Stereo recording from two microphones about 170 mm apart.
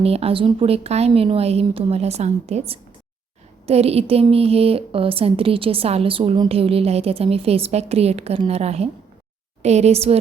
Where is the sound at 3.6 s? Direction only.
35° right (ahead or behind).